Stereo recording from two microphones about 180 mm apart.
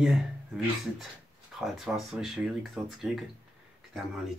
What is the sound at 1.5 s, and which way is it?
Speech, centre (ahead or behind).